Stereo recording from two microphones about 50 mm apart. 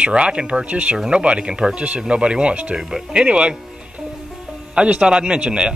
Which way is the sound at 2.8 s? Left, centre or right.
Centre.